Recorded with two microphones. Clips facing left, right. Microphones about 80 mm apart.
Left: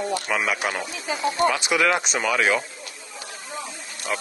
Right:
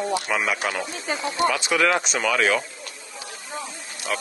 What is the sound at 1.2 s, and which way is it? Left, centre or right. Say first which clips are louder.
Speech: left 2 dB; left.